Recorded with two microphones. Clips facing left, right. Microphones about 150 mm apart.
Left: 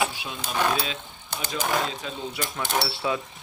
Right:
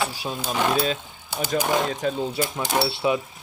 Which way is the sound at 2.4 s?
10° right (ahead or behind).